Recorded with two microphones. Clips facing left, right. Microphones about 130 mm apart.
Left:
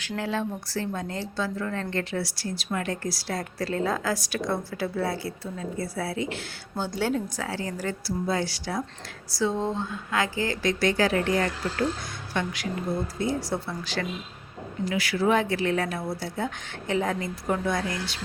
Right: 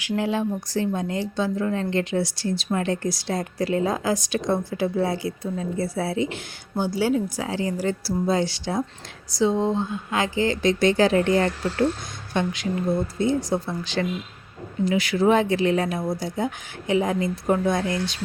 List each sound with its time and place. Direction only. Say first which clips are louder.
0.0 s a woman's voice: right 5 dB; 15° right (ahead or behind)
7.4 s a woman's voice: right 6 dB; 20° right (ahead or behind)